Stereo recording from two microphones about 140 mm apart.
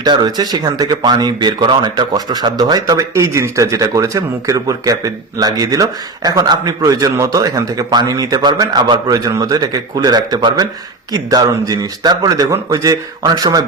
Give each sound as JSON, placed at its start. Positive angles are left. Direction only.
{"t": 0.0, "sound": "speech", "side_deg": -30}